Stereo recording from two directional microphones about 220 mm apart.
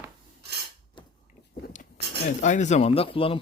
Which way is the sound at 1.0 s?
20° left (ahead or behind).